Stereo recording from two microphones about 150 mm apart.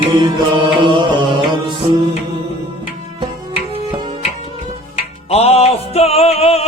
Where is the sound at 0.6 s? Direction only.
30° right (ahead or behind).